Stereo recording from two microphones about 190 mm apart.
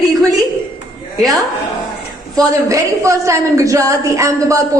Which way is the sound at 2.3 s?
20° right (ahead or behind).